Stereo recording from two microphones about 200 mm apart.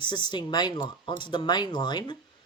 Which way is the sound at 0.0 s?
25° left (ahead or behind).